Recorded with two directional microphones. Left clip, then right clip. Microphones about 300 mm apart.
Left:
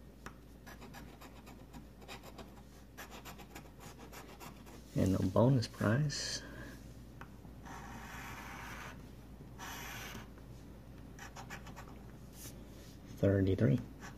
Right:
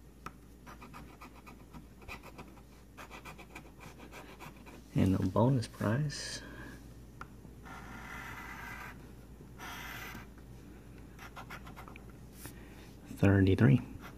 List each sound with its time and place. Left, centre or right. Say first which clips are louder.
4.9 s speech: right 1 dB; centre
11.1 s scratch: right 1 dB; centre
13.2 s speech: right 3 dB; right